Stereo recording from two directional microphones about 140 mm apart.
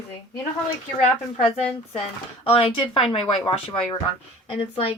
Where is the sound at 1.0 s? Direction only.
45° left (ahead or behind).